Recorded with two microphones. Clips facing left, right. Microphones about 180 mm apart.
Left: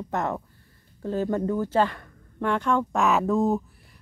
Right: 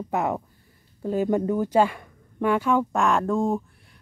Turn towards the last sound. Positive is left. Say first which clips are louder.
# left 1 dB
turn(degrees=5)  # may be behind; listen again after turning